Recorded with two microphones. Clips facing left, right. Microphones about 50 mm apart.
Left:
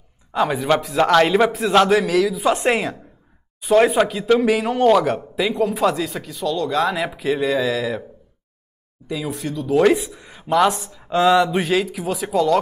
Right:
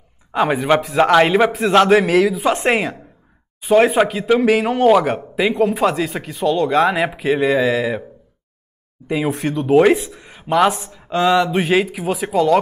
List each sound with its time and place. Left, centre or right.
0.3 s speech: right
1.9 s speech: right
2.4 s speech: centre
5.3 s speech: right
9.1 s speech: right
10.1 s a sound: centre
10.4 s speech: centre
11.1 s a sound: centre
11.6 s speech: right